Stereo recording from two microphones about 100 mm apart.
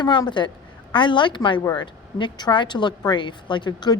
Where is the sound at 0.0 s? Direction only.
45° left (ahead or behind).